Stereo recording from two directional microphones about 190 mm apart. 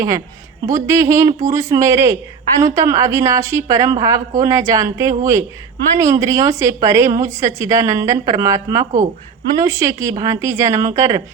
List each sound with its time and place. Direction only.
0.6 s a woman's voice: 15° right (ahead or behind)